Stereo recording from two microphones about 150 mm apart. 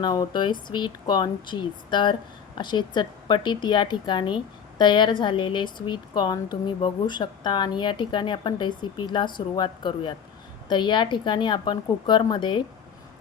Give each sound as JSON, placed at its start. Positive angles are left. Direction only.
{"t": 0.0, "sound": "a woman's voice", "side_deg": 30}